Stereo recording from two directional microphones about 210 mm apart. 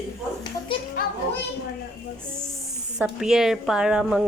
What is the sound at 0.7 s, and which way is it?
Speech, 25° left (ahead or behind).